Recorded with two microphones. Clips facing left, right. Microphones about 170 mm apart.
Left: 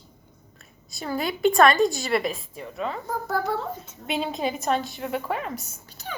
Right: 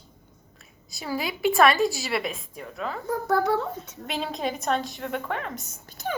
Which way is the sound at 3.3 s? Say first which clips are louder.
Right 4 dB; 65° right (ahead or behind).